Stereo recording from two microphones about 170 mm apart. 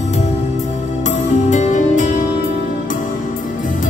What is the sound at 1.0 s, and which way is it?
Music, 45° left (ahead or behind).